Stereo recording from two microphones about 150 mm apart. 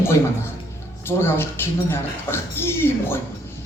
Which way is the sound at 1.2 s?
15° left (ahead or behind).